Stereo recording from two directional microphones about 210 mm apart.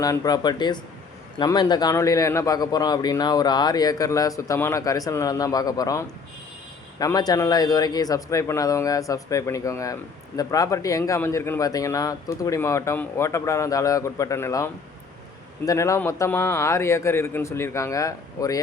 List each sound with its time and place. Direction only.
0.0 s speech: 15° left (ahead or behind)